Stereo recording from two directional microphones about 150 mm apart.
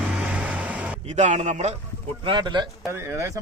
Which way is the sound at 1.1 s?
50° right (ahead or behind).